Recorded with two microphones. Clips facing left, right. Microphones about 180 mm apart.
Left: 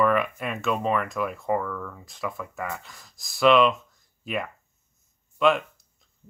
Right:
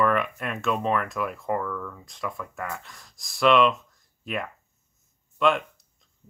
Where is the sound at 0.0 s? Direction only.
5° left (ahead or behind).